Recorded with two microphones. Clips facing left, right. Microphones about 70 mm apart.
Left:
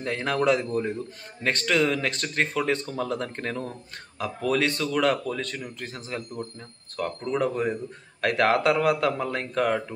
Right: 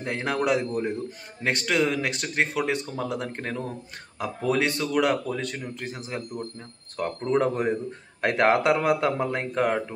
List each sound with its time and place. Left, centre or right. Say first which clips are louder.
0.0 s speech: left 2 dB; centre